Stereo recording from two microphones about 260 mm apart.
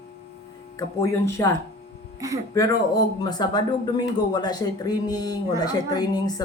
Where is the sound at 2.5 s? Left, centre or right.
Centre.